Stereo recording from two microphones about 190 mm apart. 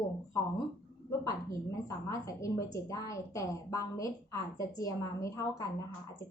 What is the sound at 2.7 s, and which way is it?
A woman's voice, 15° left (ahead or behind).